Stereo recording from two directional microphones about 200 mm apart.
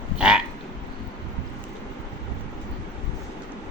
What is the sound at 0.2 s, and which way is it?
Frog, 5° right (ahead or behind).